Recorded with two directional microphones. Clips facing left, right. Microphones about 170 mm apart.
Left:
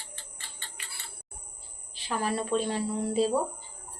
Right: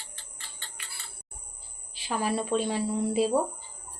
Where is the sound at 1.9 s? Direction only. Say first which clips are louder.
Right 1 dB; 10° right (ahead or behind).